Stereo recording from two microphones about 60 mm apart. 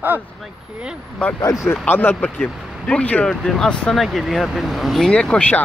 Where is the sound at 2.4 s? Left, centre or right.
Centre.